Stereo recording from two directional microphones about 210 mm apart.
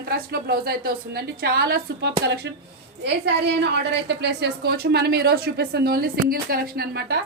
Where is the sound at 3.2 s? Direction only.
55° right (ahead or behind).